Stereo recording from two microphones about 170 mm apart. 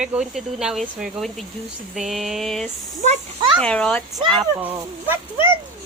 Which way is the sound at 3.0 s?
40° right (ahead or behind).